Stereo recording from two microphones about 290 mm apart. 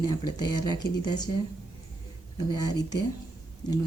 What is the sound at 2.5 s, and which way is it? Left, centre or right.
Speech, centre.